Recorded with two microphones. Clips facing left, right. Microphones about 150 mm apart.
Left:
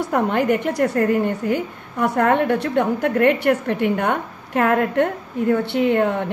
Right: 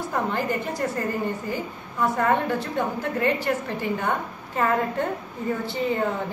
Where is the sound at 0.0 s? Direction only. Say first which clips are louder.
Left 7 dB; 65° left (ahead or behind).